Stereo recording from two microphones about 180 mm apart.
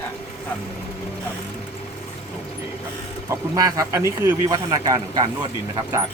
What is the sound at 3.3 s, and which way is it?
A man's voice, 20° right (ahead or behind).